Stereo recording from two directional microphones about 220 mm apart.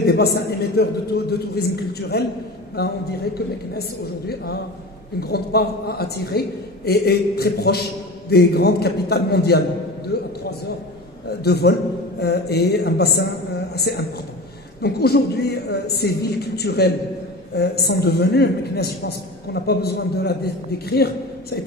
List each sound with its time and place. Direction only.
0.0 s a man's voice: 45° left (ahead or behind)
5.3 s a man's voice: 45° left (ahead or behind)
10.1 s a sound: 45° left (ahead or behind)
11.4 s a man's voice: 45° left (ahead or behind)